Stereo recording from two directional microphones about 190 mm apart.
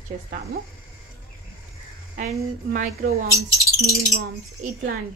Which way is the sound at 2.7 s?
50° right (ahead or behind).